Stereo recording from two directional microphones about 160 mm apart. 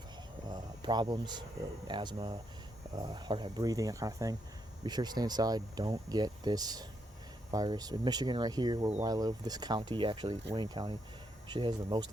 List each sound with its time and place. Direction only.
0.5 s speech: 25° right (ahead or behind)